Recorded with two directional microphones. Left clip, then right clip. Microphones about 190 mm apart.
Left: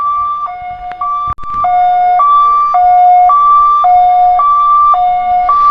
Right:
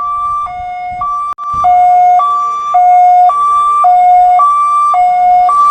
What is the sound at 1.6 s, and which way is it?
Emergency vehicle, 75° right (ahead or behind).